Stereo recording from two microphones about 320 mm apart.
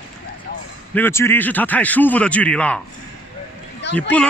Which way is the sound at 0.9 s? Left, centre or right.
Centre.